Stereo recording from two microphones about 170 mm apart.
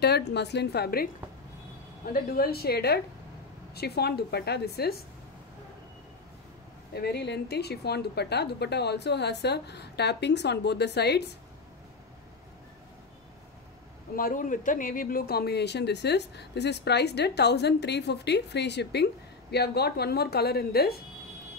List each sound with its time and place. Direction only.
0.0 s a woman's voice: 80° left
2.0 s a woman's voice: 60° left (ahead or behind)
6.9 s a woman's voice: 70° left (ahead or behind)
14.1 s a woman's voice: 55° left (ahead or behind)